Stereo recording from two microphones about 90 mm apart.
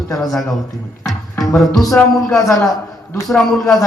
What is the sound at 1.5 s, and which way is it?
Speech, centre (ahead or behind).